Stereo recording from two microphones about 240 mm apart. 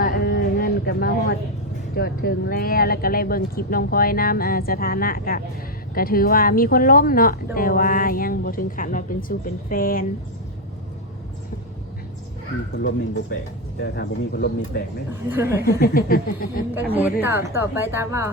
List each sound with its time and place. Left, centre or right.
0.0 s a sound: left
2.0 s speech: left
13.8 s speech: left
15.1 s a woman's voice: centre
15.8 s speech: left
16.7 s a woman's voice: centre